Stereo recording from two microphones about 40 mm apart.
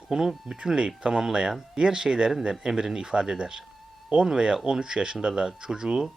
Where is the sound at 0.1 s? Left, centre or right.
Centre.